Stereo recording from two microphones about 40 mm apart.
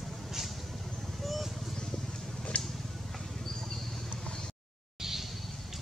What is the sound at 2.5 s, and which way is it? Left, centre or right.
Vehicle, left.